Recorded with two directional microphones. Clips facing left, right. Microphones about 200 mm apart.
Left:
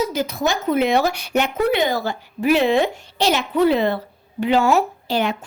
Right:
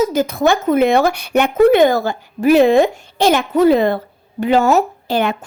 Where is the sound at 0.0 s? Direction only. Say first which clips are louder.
Right 6 dB; 50° right (ahead or behind).